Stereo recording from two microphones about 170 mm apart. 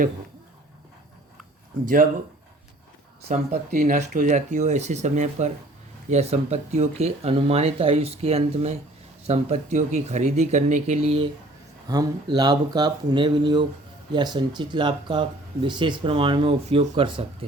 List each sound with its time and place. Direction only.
3.2 s speech: 40° right (ahead or behind)
11.9 s speech: 20° right (ahead or behind)